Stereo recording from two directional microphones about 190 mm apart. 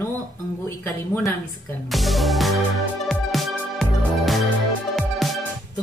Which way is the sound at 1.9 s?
Centre (ahead or behind).